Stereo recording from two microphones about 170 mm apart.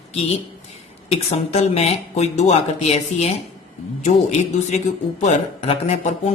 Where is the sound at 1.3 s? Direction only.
40° left (ahead or behind).